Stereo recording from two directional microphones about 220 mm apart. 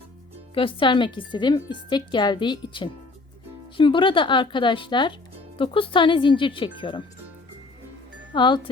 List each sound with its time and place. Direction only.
0.5 s a woman's voice: 25° left (ahead or behind)
8.3 s speech: 20° left (ahead or behind)